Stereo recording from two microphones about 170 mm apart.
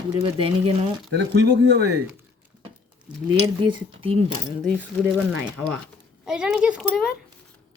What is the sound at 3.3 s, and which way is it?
Speech, 30° right (ahead or behind).